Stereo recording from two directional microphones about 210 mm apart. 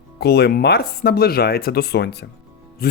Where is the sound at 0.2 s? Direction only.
50° left (ahead or behind).